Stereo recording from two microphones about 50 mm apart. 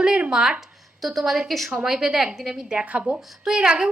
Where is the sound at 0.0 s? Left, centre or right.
Centre.